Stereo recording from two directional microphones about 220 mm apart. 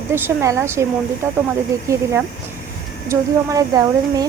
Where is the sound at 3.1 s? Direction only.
15° right (ahead or behind).